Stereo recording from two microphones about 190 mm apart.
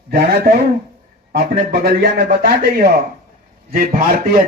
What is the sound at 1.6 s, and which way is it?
Speech, 55° right (ahead or behind).